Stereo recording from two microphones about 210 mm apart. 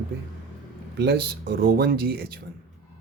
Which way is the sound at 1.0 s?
50° right (ahead or behind).